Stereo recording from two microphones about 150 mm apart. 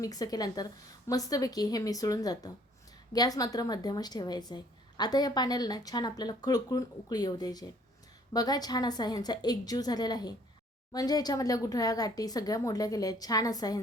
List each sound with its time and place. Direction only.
0.0 s a woman's voice: 25° left (ahead or behind)